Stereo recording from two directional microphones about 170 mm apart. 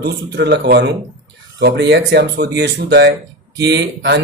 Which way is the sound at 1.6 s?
90° right.